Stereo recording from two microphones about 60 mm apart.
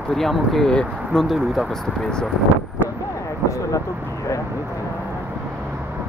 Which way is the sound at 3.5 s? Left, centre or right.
Left.